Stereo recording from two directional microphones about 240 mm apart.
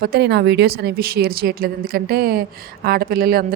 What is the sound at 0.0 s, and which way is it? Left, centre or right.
Speech, right.